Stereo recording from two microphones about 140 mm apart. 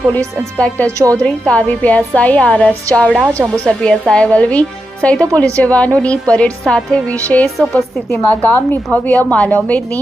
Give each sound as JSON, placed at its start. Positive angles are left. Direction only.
{"t": 0.5, "sound": "a woman's voice", "side_deg": 10}
{"t": 0.9, "sound": "speech", "side_deg": -20}
{"t": 1.1, "sound": "a woman's voice", "side_deg": 10}
{"t": 3.3, "sound": "speech", "side_deg": -20}
{"t": 3.6, "sound": "a woman's voice", "side_deg": 5}